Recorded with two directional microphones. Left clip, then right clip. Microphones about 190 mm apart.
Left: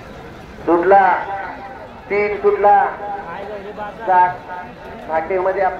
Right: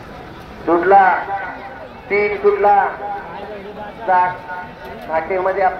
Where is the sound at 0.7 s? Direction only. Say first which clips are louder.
Right 1 dB; 15° right (ahead or behind).